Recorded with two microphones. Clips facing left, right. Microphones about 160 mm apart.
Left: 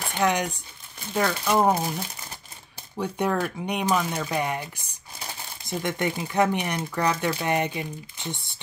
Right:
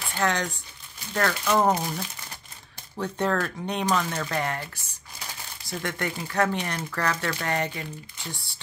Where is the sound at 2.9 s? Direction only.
10° left (ahead or behind).